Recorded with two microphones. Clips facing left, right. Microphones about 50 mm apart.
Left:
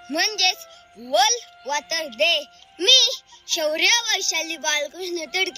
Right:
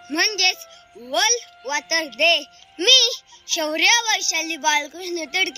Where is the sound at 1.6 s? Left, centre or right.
Right.